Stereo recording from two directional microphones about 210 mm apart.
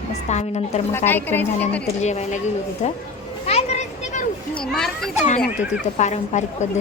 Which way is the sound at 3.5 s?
30° left (ahead or behind).